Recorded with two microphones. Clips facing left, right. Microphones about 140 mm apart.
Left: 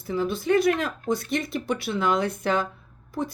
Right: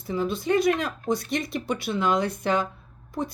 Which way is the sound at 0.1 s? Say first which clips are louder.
Left 1 dB; 20° right (ahead or behind).